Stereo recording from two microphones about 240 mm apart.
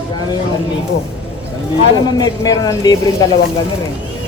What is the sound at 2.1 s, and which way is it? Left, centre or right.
Speech, centre.